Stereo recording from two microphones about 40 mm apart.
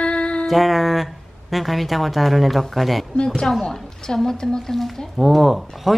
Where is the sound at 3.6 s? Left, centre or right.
Centre.